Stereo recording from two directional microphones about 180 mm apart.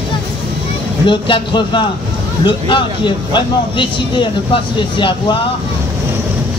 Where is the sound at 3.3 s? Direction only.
25° left (ahead or behind).